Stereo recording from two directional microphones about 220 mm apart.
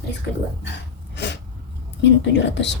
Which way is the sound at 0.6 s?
50° left (ahead or behind).